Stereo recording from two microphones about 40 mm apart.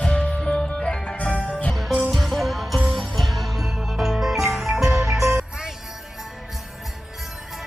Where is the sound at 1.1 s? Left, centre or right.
Left.